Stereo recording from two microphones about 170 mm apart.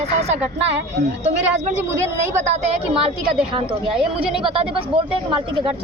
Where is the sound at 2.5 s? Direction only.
35° right (ahead or behind).